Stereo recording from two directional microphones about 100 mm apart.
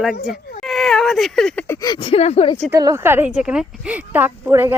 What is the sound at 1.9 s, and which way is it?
Speech, 65° left (ahead or behind).